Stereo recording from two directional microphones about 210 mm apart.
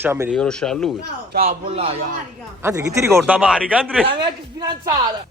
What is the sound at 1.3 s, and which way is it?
Speech, 45° right (ahead or behind).